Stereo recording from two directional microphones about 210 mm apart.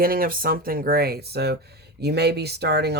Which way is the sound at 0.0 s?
45° right (ahead or behind).